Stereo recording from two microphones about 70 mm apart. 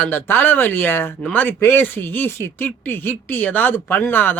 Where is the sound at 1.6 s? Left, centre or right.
Left.